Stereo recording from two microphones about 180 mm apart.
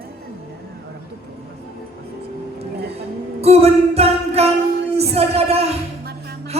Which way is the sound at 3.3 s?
35° right (ahead or behind).